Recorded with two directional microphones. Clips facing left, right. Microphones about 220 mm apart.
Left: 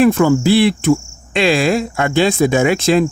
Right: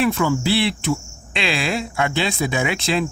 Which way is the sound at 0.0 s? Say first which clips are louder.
Left 8 dB; 50° left (ahead or behind).